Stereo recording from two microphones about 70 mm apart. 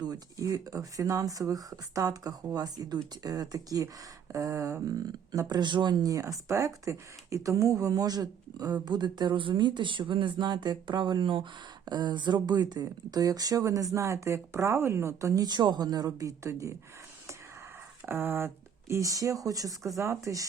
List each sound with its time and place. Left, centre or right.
0.0 s speech: right
6.1 s speech: right
13.9 s speech: right
15.4 s speech: right
18.0 s speech: right
20.0 s speech: right